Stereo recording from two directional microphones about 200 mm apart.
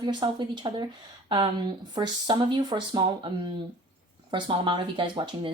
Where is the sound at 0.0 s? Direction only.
20° right (ahead or behind).